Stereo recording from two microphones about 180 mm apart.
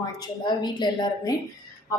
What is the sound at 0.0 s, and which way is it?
A woman's voice, 25° left (ahead or behind).